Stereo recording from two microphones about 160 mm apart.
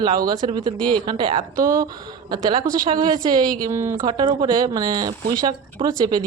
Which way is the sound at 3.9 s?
30° right (ahead or behind).